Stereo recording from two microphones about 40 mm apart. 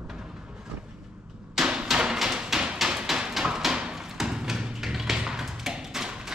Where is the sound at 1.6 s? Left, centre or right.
Right.